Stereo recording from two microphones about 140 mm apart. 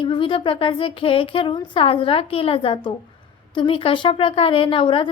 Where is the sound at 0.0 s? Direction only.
35° left (ahead or behind).